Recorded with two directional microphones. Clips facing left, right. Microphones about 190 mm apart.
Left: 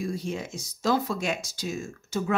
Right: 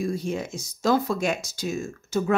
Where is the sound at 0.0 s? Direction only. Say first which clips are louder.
Right 4 dB; 50° right (ahead or behind).